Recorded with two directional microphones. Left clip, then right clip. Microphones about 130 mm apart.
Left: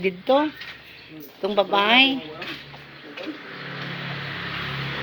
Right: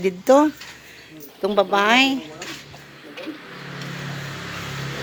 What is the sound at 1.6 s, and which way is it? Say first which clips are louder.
Speech: right 1 dB; 45° right (ahead or behind).